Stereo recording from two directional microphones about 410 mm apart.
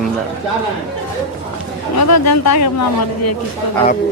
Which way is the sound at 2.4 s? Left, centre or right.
Left.